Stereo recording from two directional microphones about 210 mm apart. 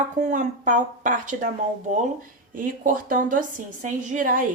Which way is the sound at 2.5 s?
40° right (ahead or behind).